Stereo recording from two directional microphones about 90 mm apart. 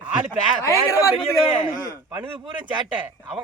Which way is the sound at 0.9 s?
35° left (ahead or behind).